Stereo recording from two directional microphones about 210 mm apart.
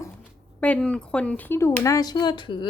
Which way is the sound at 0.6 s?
5° left (ahead or behind).